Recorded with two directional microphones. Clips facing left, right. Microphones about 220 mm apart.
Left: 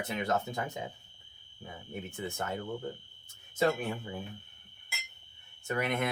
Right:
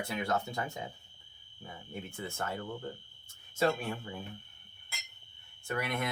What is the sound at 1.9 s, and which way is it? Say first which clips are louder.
Speech: left 3 dB; 20° left (ahead or behind).